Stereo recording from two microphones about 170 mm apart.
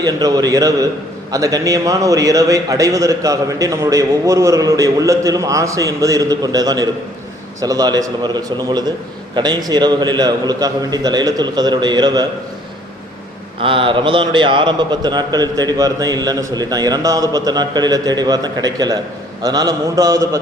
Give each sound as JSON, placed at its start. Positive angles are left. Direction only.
{"t": 0.0, "sound": "a man's voice", "side_deg": -20}
{"t": 13.6, "sound": "a man's voice", "side_deg": -30}